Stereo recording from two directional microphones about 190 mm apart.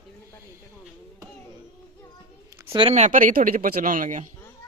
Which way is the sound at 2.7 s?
30° right (ahead or behind).